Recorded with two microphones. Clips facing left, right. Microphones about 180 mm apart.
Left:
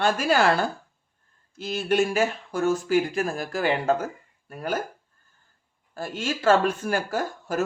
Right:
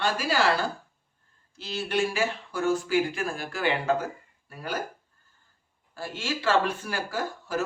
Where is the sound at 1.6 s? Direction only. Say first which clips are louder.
Left 5 dB; 45° left (ahead or behind).